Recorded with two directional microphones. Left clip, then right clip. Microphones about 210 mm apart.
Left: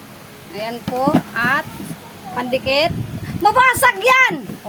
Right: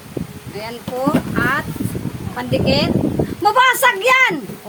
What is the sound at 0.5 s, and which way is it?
Speech, 10° left (ahead or behind).